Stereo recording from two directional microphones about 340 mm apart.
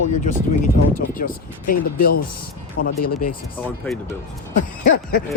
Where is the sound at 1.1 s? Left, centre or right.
Left.